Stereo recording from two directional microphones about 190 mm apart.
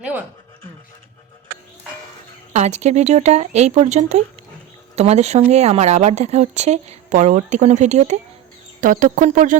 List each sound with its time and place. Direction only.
2.5 s speech: 35° right (ahead or behind)